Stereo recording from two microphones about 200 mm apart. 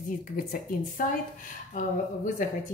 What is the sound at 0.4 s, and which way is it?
Speech, 45° left (ahead or behind).